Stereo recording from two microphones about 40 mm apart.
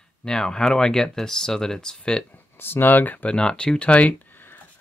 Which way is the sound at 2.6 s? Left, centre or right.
Left.